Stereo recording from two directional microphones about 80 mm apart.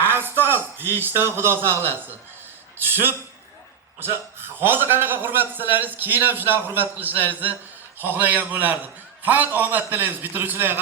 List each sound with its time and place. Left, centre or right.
0.4 s a man's voice: right